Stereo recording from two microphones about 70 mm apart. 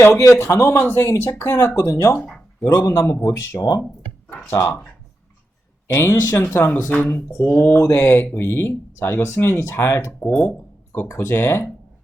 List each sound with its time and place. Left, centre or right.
0.0 s speech: left
2.2 s a sound: centre
2.6 s a man's voice: left
5.9 s speech: left
10.1 s speech: left
10.9 s speech: left